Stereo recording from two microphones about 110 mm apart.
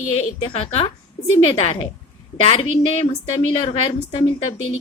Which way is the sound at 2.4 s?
60° left (ahead or behind).